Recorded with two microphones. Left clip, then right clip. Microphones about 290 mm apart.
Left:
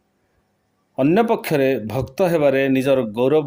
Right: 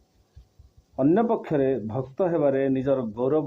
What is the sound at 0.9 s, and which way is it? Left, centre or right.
A man's voice, left.